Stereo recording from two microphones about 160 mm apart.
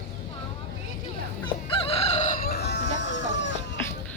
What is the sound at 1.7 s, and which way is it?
Crowing, 35° left (ahead or behind).